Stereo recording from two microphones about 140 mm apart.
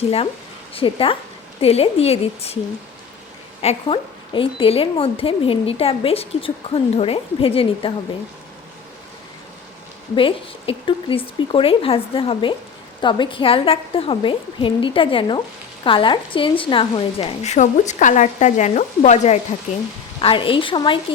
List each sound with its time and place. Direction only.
0.7 s a woman's voice: 40° left (ahead or behind)
3.6 s a woman's voice: 45° left (ahead or behind)
10.2 s a woman's voice: 40° left (ahead or behind); by 19.4 s 55° left (ahead or behind)
20.2 s speech: 40° left (ahead or behind)